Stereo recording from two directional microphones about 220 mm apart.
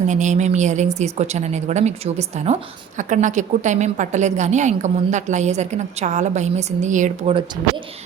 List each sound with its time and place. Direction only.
0.1 s a woman's voice: 35° right (ahead or behind)